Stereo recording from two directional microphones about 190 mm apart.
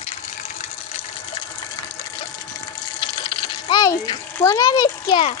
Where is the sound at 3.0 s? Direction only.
25° left (ahead or behind).